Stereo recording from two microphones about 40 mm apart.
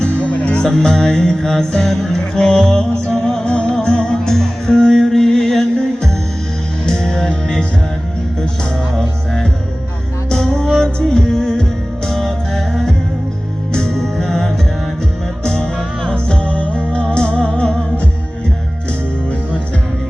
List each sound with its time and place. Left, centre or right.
0.0 s music: left
0.6 s music: centre
4.2 s music: centre
9.0 s music: centre